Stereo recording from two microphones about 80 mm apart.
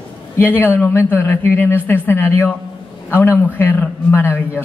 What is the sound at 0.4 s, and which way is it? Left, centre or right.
A man's voice, left.